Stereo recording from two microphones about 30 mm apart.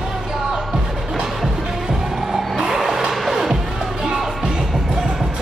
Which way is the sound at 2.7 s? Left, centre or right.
Centre.